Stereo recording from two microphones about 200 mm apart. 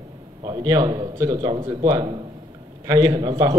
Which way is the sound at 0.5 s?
20° right (ahead or behind).